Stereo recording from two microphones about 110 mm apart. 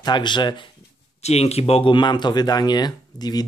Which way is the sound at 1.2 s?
70° left (ahead or behind).